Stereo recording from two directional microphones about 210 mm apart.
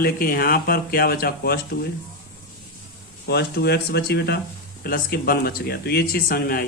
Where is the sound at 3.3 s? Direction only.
50° left (ahead or behind).